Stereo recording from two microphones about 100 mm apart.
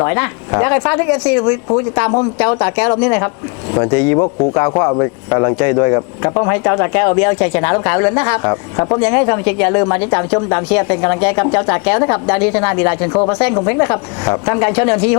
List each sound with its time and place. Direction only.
0.0 s speech: 25° left (ahead or behind)